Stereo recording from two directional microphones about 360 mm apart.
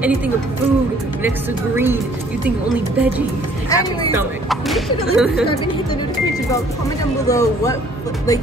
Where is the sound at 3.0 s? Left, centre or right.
Centre.